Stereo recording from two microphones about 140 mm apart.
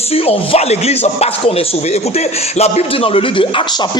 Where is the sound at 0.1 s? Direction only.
45° left (ahead or behind).